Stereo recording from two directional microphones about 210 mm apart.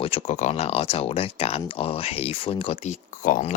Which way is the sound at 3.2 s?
35° left (ahead or behind).